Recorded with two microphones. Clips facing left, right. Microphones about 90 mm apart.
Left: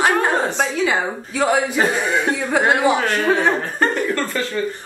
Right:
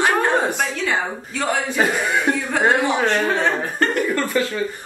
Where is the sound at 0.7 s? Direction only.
10° left (ahead or behind).